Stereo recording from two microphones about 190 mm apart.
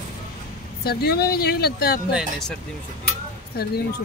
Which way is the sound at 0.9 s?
55° left (ahead or behind).